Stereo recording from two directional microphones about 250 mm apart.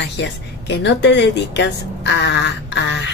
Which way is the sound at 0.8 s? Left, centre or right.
Left.